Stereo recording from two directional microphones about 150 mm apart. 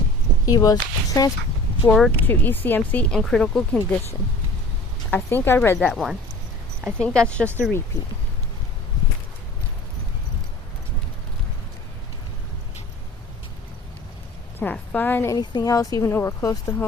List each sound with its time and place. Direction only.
0.4 s speech: 25° left (ahead or behind)
1.8 s speech: 10° left (ahead or behind)
5.1 s speech: 15° left (ahead or behind)
14.6 s speech: 10° left (ahead or behind)
15.4 s speech: 25° left (ahead or behind)